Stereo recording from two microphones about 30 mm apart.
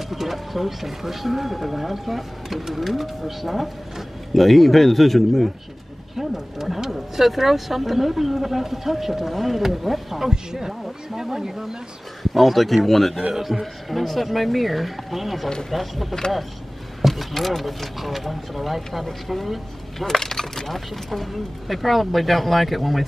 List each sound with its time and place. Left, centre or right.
0.1 s speech: centre
6.1 s speech: centre
10.2 s speech: centre
12.2 s speech: centre
13.3 s speech: centre
20.1 s speech: centre